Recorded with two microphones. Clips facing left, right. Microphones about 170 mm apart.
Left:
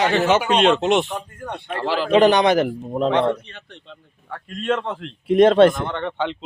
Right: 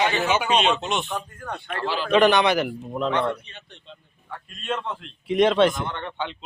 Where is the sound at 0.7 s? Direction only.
90° left.